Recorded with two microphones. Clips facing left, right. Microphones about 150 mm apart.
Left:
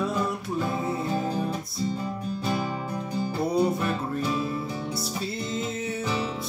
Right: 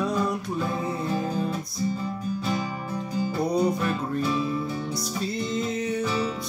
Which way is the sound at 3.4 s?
5° left (ahead or behind).